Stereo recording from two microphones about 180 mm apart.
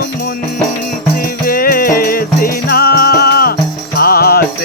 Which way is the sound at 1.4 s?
55° left (ahead or behind).